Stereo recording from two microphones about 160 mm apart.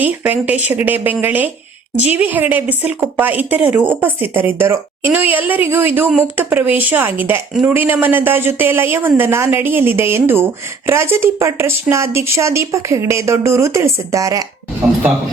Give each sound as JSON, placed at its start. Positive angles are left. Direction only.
{"t": 0.0, "sound": "a woman's voice", "side_deg": -10}